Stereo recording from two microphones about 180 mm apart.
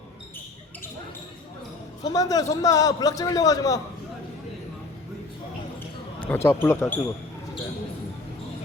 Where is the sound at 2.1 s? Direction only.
20° left (ahead or behind).